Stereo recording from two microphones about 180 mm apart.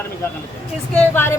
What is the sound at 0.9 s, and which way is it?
Speech, 10° left (ahead or behind).